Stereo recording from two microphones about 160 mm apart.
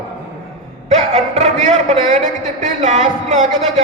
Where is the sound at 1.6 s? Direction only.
45° right (ahead or behind).